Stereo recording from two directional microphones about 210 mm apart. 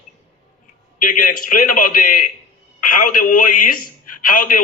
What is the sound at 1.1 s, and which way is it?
A man's voice, 40° left (ahead or behind).